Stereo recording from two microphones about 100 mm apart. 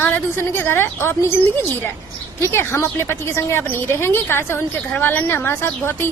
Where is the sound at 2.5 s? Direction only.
25° left (ahead or behind).